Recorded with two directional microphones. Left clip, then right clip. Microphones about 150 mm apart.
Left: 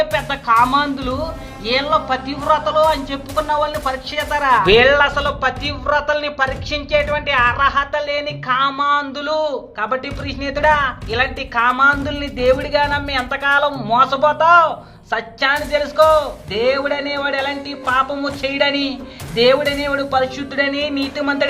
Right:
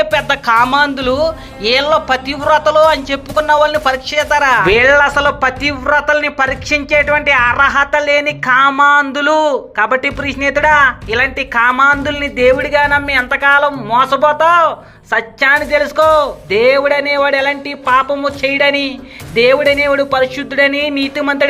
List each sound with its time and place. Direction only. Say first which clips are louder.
0.0 s speech: right 6 dB; 30° right (ahead or behind)